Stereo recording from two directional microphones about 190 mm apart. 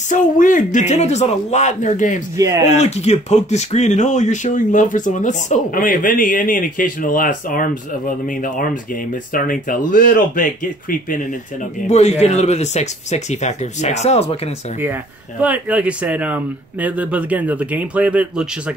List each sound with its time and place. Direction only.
0.1 s speech: 45° left (ahead or behind)
2.3 s speech: 15° right (ahead or behind)
2.7 s speech: 35° left (ahead or behind)
9.3 s speech: 45° left (ahead or behind)
15.4 s speech: 5° right (ahead or behind)